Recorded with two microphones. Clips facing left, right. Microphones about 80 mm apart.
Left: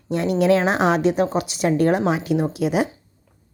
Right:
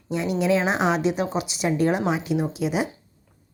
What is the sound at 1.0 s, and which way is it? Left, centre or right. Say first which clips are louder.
A woman's voice: left 4 dB; left.